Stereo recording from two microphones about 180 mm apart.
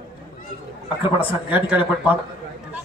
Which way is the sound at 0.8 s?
30° left (ahead or behind).